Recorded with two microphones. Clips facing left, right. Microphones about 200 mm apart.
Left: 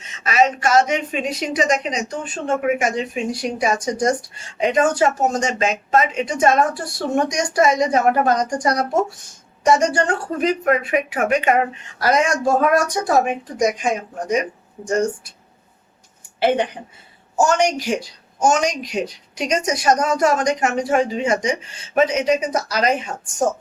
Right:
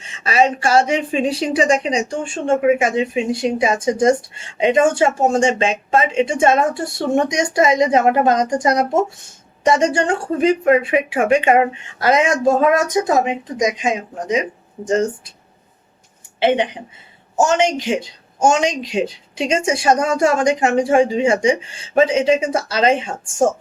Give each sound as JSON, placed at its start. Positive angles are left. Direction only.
{"t": 0.0, "sound": "a woman's voice", "side_deg": -30}
{"t": 16.4, "sound": "a woman's voice", "side_deg": -20}